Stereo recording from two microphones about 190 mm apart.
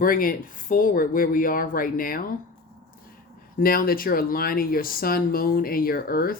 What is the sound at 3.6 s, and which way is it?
Speech, 50° left (ahead or behind).